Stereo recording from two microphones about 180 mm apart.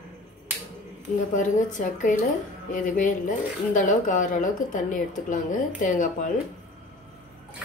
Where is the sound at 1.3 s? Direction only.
45° left (ahead or behind).